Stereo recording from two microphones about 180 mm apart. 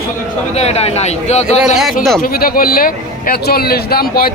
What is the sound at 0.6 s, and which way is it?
Speech, 35° left (ahead or behind).